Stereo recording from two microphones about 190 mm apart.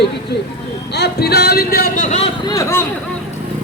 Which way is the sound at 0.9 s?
60° left (ahead or behind).